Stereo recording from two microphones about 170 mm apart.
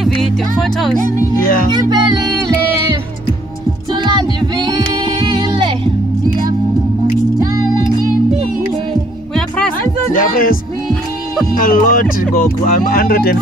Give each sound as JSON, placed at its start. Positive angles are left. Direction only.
{"t": 0.0, "sound": "music", "side_deg": 0}
{"t": 1.7, "sound": "music", "side_deg": -25}
{"t": 3.9, "sound": "child singing", "side_deg": -25}
{"t": 10.1, "sound": "speech", "side_deg": 55}
{"t": 11.6, "sound": "speech", "side_deg": 55}